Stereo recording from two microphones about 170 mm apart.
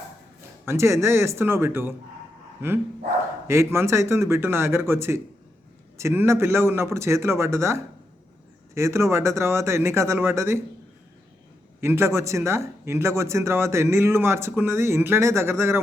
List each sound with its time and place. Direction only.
0.6 s speech: 15° right (ahead or behind)
3.4 s speech: 15° right (ahead or behind)
11.8 s speech: 15° right (ahead or behind)